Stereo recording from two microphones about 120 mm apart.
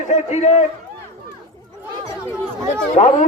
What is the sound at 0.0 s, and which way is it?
Speech, 75° left (ahead or behind).